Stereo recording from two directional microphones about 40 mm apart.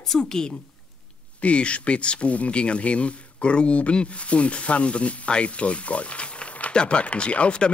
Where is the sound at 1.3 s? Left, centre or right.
Left.